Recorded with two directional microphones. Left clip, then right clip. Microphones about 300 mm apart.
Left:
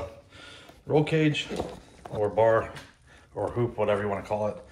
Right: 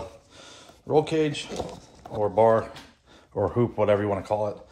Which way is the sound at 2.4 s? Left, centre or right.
Centre.